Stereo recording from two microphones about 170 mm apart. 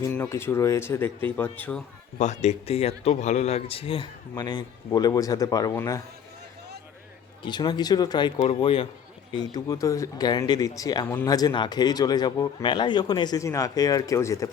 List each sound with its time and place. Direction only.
0.1 s speech: 10° left (ahead or behind)
2.1 s speech: 45° left (ahead or behind); by 6.0 s 20° left (ahead or behind)
7.4 s speech: 25° left (ahead or behind)